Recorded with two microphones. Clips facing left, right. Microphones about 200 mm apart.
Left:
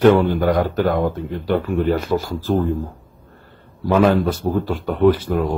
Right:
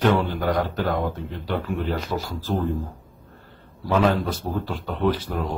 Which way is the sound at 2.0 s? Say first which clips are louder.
Left 7 dB; 55° left (ahead or behind).